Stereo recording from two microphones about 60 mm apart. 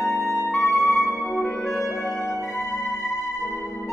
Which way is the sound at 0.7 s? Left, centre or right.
Left.